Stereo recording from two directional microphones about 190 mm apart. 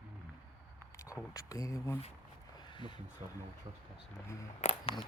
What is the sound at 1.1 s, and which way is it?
Speech, 15° left (ahead or behind).